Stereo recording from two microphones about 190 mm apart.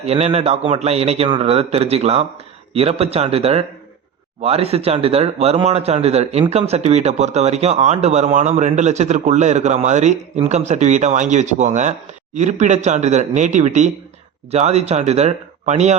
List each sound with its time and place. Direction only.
0.1 s speech: 35° right (ahead or behind)